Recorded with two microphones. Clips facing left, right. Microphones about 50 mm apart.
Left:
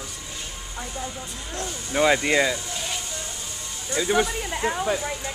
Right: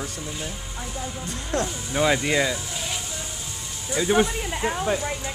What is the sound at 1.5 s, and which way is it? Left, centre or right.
Speech, right.